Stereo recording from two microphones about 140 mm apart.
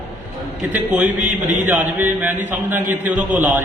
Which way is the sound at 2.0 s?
10° right (ahead or behind).